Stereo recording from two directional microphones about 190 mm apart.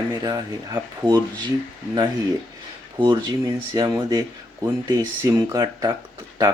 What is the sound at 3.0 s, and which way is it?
Speech, 20° right (ahead or behind).